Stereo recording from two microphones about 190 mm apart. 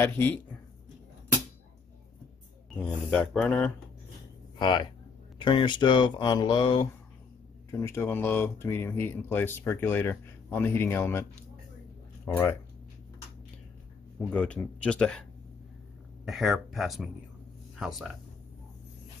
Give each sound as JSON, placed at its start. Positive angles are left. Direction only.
{"t": 0.0, "sound": "speech", "side_deg": 10}
{"t": 2.8, "sound": "speech", "side_deg": 5}
{"t": 4.6, "sound": "speech", "side_deg": 25}
{"t": 7.8, "sound": "speech", "side_deg": 10}
{"t": 14.3, "sound": "speech", "side_deg": 5}
{"t": 16.3, "sound": "speech", "side_deg": 0}